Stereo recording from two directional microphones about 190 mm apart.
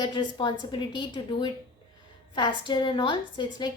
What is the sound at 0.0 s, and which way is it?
A woman's voice, 25° left (ahead or behind).